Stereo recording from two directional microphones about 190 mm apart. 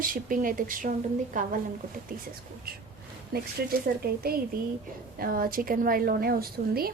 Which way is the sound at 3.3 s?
55° right (ahead or behind).